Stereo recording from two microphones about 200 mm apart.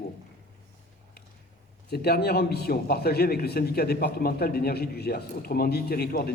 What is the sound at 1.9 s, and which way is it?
A man's voice, 50° left (ahead or behind).